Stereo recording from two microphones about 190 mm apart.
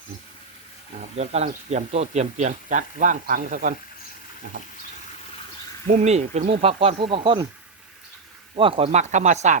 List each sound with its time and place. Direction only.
1.1 s speech: 35° right (ahead or behind)
5.9 s speech: 35° right (ahead or behind)
8.5 s speech: 30° right (ahead or behind)